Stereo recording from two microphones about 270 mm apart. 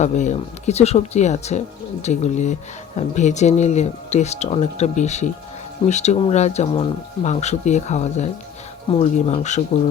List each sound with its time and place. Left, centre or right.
0.0 s speech: left